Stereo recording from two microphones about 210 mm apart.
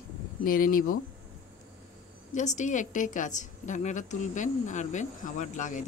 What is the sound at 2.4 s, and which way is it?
A woman's voice, 35° left (ahead or behind).